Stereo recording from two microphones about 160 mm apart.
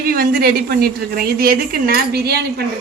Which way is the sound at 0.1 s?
70° right (ahead or behind).